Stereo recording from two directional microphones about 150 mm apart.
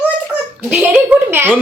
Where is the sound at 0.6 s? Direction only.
5° right (ahead or behind).